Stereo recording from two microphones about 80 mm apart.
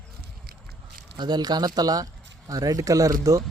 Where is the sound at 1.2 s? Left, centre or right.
Right.